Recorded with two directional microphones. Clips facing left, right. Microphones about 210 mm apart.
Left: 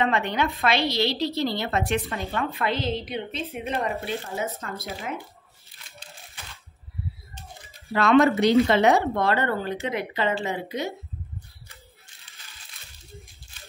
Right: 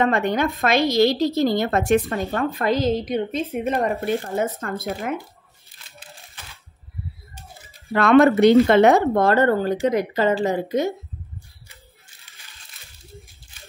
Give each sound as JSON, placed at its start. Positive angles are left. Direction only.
{"t": 0.0, "sound": "a woman's voice", "side_deg": -45}
{"t": 7.9, "sound": "a woman's voice", "side_deg": -55}